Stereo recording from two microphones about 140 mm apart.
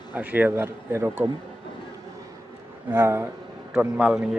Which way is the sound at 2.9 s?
20° right (ahead or behind).